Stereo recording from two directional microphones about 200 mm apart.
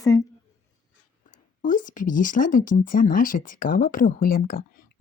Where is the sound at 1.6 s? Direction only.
40° left (ahead or behind).